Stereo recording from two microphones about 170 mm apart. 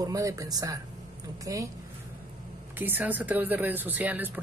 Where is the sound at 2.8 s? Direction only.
10° right (ahead or behind).